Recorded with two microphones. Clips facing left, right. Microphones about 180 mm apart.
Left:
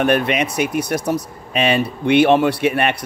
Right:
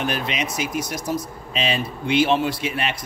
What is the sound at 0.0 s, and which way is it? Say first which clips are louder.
Speech: left 9 dB; 60° left (ahead or behind).